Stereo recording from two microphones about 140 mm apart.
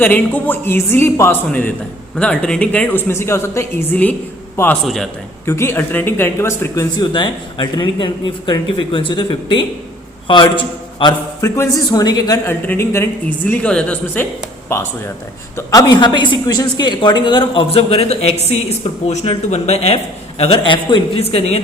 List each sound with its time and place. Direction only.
0.0 s a woman's voice: 10° left (ahead or behind)
7.0 s a woman's voice: 35° left (ahead or behind)
11.3 s a man's voice: 20° left (ahead or behind)
12.5 s a woman's voice: 15° left (ahead or behind); by 21.6 s 45° left (ahead or behind)